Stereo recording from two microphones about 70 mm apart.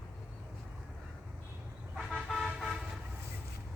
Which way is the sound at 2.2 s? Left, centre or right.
Centre.